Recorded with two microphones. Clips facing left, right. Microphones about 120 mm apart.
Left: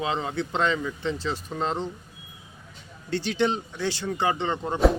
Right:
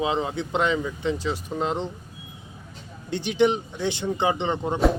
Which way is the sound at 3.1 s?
15° right (ahead or behind).